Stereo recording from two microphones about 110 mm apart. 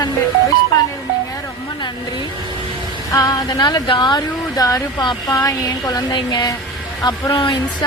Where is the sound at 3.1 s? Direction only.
35° left (ahead or behind).